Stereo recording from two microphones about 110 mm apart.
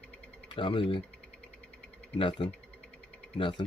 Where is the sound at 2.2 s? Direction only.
50° left (ahead or behind).